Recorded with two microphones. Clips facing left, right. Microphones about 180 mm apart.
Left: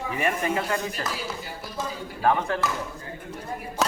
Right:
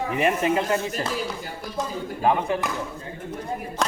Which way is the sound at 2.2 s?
15° right (ahead or behind).